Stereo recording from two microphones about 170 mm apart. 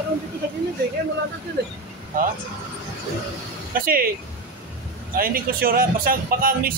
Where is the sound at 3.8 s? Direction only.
60° right (ahead or behind).